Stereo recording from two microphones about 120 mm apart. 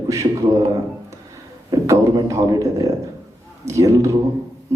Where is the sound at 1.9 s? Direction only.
25° right (ahead or behind).